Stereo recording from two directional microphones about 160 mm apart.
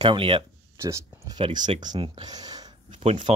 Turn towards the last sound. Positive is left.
turn(degrees=-30)  # may be behind; listen again after turning